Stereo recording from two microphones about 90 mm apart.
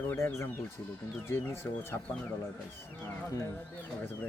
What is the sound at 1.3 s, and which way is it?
Speech, 25° left (ahead or behind).